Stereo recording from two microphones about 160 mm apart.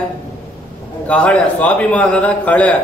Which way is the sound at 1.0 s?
10° left (ahead or behind).